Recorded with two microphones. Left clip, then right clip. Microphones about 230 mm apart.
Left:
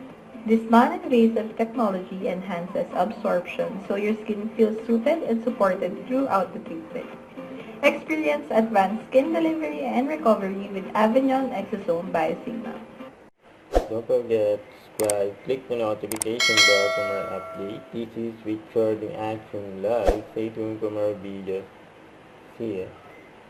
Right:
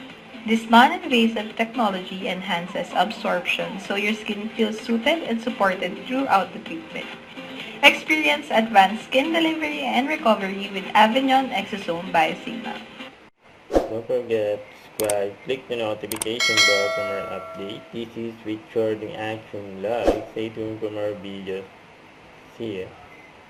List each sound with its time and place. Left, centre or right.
0.4 s a woman's voice: centre
13.7 s speech: centre
22.6 s speech: centre